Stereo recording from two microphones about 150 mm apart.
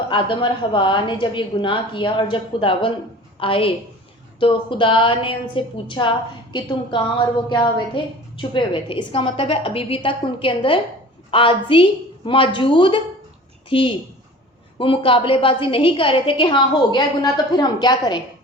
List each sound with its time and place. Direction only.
0.1 s a woman's voice: 35° left (ahead or behind)